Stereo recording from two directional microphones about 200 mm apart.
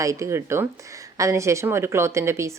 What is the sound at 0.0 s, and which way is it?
Speech, 15° right (ahead or behind).